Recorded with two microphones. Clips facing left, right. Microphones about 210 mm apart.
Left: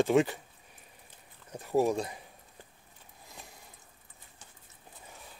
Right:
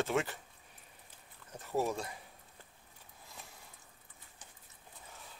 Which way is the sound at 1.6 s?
15° left (ahead or behind).